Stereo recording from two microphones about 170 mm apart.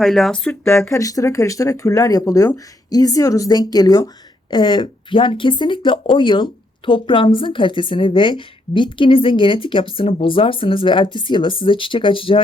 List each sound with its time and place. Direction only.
0.0 s speech: centre (ahead or behind)
0.6 s speech: 15° left (ahead or behind); by 12.4 s 30° left (ahead or behind)